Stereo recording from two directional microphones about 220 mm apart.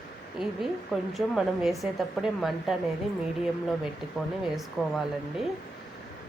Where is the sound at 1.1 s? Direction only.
Centre (ahead or behind).